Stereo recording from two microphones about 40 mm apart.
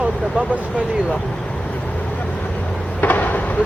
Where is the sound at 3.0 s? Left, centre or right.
Left.